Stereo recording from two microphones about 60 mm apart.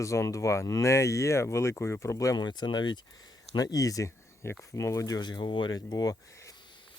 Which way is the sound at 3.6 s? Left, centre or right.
Left.